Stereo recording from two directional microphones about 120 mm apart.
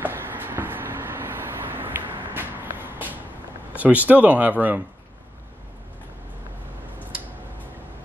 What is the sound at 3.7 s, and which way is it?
Speech, 15° right (ahead or behind).